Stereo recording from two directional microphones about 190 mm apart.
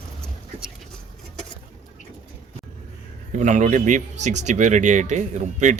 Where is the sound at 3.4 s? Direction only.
40° right (ahead or behind).